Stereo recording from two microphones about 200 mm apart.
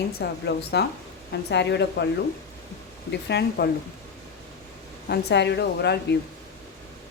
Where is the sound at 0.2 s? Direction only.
55° left (ahead or behind).